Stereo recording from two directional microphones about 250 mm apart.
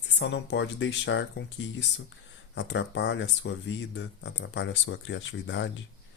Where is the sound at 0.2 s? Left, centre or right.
Left.